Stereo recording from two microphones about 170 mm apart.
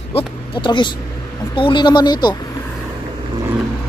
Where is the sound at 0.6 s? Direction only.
30° left (ahead or behind).